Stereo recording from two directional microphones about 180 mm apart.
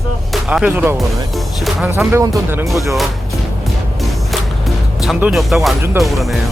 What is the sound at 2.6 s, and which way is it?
Speech, centre (ahead or behind).